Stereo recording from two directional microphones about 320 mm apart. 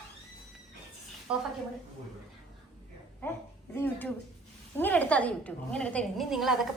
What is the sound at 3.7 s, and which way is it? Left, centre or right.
A woman's voice, centre.